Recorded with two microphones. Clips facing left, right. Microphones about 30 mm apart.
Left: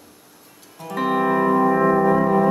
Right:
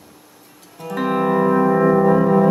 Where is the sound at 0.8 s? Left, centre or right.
Centre.